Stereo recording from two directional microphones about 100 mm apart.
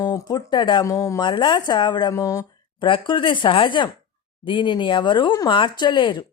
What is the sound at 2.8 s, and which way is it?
Speech, 55° left (ahead or behind).